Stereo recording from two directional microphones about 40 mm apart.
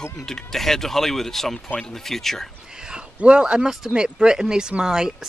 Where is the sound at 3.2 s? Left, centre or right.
Right.